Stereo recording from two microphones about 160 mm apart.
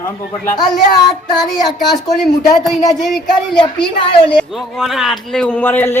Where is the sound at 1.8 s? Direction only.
Centre (ahead or behind).